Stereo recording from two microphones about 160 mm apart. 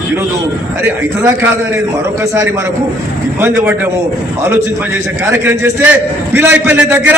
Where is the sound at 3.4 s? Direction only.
15° right (ahead or behind).